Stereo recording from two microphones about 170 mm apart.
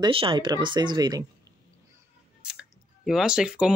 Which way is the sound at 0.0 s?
30° right (ahead or behind).